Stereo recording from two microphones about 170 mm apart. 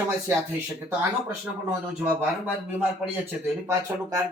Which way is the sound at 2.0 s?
10° right (ahead or behind).